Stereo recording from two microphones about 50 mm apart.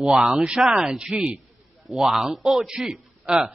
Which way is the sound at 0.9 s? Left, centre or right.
Centre.